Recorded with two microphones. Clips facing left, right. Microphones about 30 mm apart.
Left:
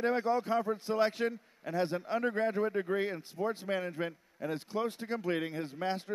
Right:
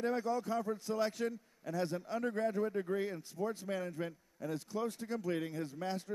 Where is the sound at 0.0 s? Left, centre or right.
Left.